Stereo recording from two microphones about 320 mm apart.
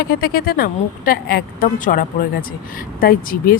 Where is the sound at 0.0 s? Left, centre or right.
Left.